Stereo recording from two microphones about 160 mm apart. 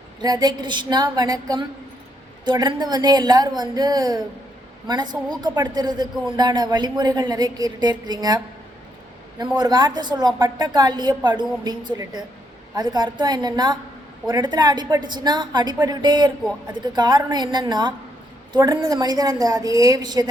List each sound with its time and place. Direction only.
0.2 s a man's voice: 25° right (ahead or behind)
5.3 s a man's voice: 25° right (ahead or behind)
9.6 s a man's voice: 25° right (ahead or behind)